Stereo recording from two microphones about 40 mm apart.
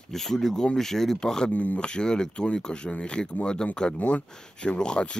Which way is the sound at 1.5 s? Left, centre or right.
Left.